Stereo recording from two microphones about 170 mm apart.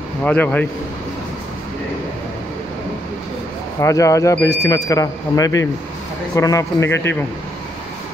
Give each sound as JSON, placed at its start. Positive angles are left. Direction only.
{"t": 0.2, "sound": "a man's voice", "side_deg": 10}
{"t": 3.8, "sound": "a man's voice", "side_deg": 20}